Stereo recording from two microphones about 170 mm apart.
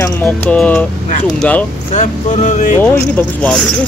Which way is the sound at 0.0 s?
10° left (ahead or behind).